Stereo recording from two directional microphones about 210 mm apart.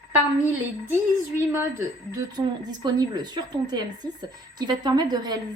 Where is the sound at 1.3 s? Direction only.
10° right (ahead or behind).